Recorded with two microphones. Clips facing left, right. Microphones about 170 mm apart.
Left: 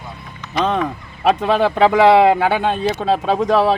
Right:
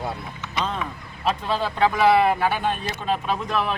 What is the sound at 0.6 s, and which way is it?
Speech, 80° left.